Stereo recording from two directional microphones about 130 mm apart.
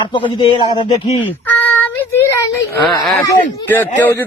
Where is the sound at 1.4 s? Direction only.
15° left (ahead or behind).